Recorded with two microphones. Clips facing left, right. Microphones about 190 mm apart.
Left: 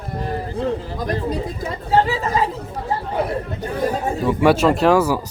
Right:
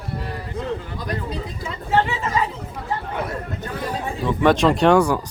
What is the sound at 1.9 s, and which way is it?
Speech, 35° left (ahead or behind).